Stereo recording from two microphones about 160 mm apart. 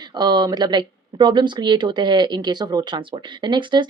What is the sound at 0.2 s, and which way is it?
Speech, 25° right (ahead or behind).